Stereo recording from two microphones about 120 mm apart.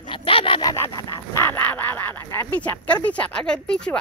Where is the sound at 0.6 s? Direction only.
30° left (ahead or behind).